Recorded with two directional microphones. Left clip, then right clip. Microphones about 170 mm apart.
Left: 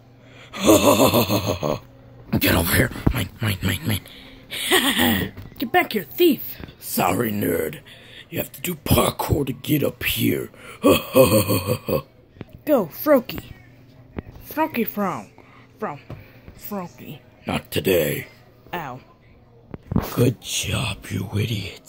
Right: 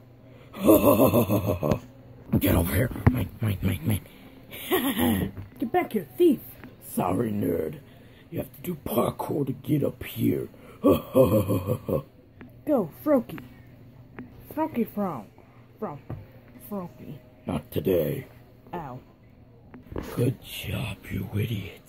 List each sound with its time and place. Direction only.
0.4 s speech: centre (ahead or behind)
14.5 s speech: 10° left (ahead or behind)
16.7 s speech: 15° left (ahead or behind)
20.2 s speech: 30° left (ahead or behind)